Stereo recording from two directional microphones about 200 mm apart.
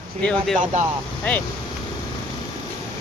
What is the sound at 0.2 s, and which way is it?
Speech, 5° left (ahead or behind).